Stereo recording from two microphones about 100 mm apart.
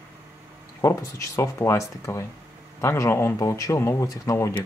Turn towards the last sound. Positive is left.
turn(degrees=30)  # may be behind; listen again after turning